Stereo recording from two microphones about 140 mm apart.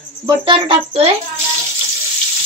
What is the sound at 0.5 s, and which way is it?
Speech, 40° right (ahead or behind).